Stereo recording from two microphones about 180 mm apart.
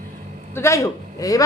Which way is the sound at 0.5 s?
15° left (ahead or behind).